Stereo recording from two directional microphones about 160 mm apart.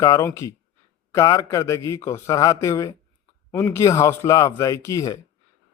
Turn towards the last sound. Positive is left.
turn(degrees=20)  # may be behind; listen again after turning